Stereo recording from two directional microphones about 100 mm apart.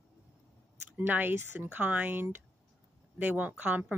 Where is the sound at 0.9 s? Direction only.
20° right (ahead or behind).